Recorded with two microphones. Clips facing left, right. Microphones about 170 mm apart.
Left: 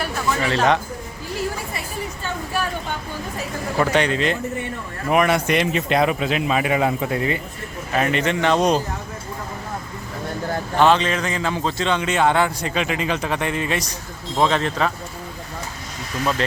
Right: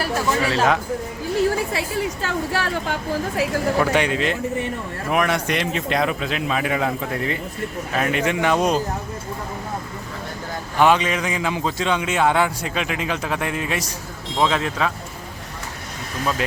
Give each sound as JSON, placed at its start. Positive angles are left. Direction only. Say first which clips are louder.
{"t": 0.4, "sound": "a man's voice", "louder": "left 3 dB", "side_deg": -5}
{"t": 1.7, "sound": "a woman's voice", "louder": "right 6 dB", "side_deg": -90}
{"t": 3.9, "sound": "a man's voice", "louder": "left 1 dB", "side_deg": -5}
{"t": 10.8, "sound": "a man's voice", "louder": "even", "side_deg": -10}